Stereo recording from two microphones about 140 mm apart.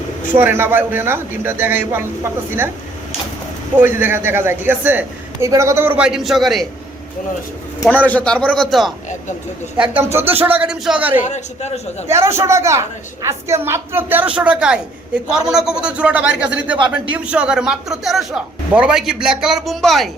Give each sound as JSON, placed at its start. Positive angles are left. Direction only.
{"t": 0.3, "sound": "speech", "side_deg": -15}
{"t": 3.8, "sound": "speech", "side_deg": -15}
{"t": 6.0, "sound": "a man's voice", "side_deg": -5}
{"t": 8.0, "sound": "a man's voice", "side_deg": 10}
{"t": 11.3, "sound": "a man's voice", "side_deg": 55}
{"t": 12.0, "sound": "speech", "side_deg": -20}
{"t": 16.7, "sound": "speech", "side_deg": -35}
{"t": 17.2, "sound": "a man's voice", "side_deg": -10}